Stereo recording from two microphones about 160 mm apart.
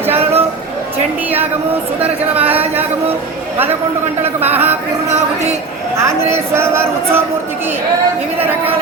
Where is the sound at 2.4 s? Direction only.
10° right (ahead or behind).